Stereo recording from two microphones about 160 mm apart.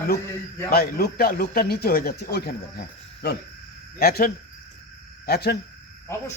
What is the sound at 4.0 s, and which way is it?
A man's voice, 70° left (ahead or behind).